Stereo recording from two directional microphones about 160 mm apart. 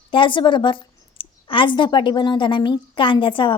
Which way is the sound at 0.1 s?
30° left (ahead or behind).